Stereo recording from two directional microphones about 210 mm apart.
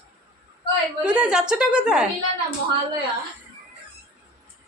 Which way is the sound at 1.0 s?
5° right (ahead or behind).